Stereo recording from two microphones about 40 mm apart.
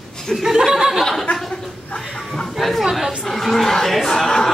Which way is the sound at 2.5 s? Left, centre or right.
Centre.